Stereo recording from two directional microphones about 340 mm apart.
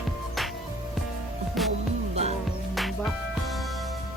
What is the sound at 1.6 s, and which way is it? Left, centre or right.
Music, centre.